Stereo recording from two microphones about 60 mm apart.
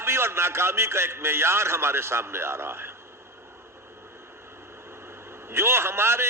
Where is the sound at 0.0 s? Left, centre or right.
Right.